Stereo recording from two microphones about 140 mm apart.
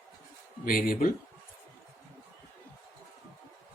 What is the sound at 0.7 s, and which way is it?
Speech, 90° left.